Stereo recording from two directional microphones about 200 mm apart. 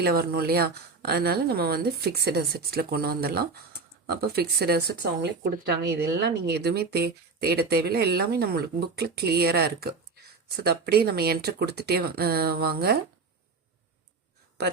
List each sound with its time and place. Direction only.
0.0 s speech: 50° right (ahead or behind)
14.6 s speech: 55° right (ahead or behind)